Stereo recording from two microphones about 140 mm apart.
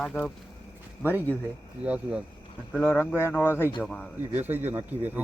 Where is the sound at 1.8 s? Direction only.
10° right (ahead or behind).